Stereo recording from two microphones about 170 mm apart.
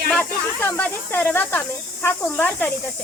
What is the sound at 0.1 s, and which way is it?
Speech, 10° left (ahead or behind).